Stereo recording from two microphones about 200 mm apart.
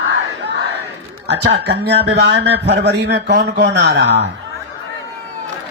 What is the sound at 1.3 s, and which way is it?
A man's voice, 55° right (ahead or behind).